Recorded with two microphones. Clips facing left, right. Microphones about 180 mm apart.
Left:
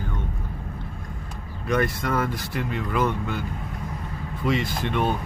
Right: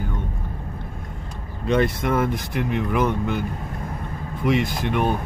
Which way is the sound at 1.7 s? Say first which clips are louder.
Right 4 dB; 25° right (ahead or behind).